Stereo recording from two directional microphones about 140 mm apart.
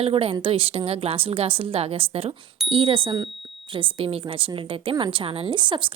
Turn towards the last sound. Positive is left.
turn(degrees=-35)  # may be behind; listen again after turning